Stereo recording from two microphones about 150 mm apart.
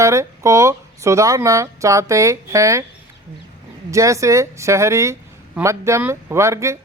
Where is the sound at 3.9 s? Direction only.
20° right (ahead or behind).